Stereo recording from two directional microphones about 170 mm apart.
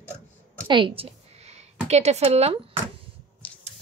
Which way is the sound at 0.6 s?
30° right (ahead or behind).